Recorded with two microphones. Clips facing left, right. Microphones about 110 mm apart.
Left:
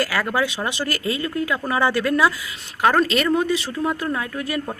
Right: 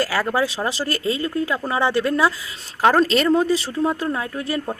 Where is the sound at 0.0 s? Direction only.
30° right (ahead or behind).